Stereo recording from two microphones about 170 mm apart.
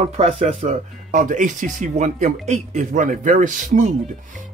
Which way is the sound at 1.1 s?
50° right (ahead or behind).